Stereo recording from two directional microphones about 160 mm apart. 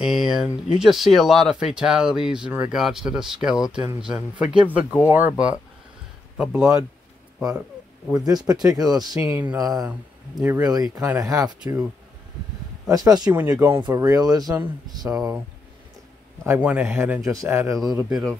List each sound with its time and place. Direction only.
0.0 s speech: 5° right (ahead or behind)
6.3 s speech: 5° right (ahead or behind)
8.1 s speech: 25° right (ahead or behind)
12.9 s speech: 25° right (ahead or behind)
16.4 s speech: 10° right (ahead or behind)